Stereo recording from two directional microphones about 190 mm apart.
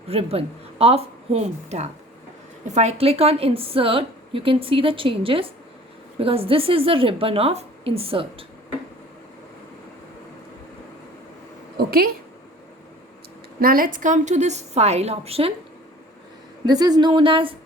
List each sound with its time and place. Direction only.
0.1 s a woman's voice: 30° right (ahead or behind)
11.8 s a sound: 50° right (ahead or behind)
13.6 s a woman's voice: 50° right (ahead or behind); by 15.5 s 30° right (ahead or behind)
16.6 s a woman's voice: 20° right (ahead or behind)